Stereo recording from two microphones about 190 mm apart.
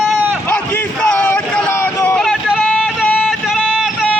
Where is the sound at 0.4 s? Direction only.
10° left (ahead or behind).